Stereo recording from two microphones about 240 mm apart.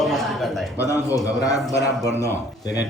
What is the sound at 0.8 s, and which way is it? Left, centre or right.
Speech, centre.